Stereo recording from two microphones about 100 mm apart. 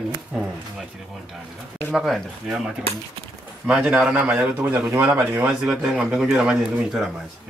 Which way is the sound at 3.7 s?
5° right (ahead or behind).